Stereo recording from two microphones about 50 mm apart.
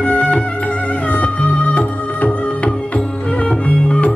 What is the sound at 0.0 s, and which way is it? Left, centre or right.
Music, left.